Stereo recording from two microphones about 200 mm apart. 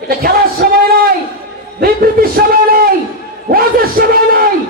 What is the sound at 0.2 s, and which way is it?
Music, 50° right (ahead or behind).